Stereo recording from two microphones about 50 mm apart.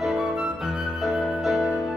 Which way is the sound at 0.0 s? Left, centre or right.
Centre.